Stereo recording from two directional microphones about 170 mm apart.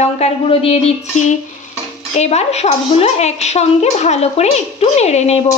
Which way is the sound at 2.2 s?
40° left (ahead or behind).